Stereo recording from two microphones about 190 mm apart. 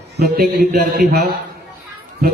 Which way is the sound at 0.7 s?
55° right (ahead or behind).